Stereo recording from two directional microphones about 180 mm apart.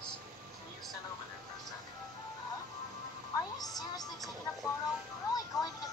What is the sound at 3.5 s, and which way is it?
Music, 20° left (ahead or behind).